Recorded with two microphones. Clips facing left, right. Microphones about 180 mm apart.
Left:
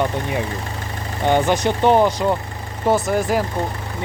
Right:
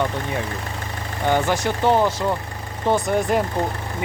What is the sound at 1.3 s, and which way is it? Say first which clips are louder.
Speech: left 3 dB; 20° left (ahead or behind).